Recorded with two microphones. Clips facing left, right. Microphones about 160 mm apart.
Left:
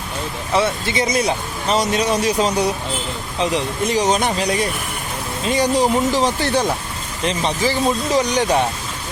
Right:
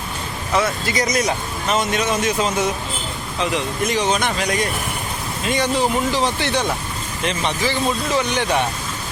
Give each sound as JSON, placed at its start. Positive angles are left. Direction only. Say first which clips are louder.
{"t": 0.5, "sound": "speech", "louder": "left 1 dB", "side_deg": 25}